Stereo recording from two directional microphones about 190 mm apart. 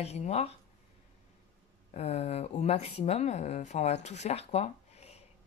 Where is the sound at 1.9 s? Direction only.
35° left (ahead or behind).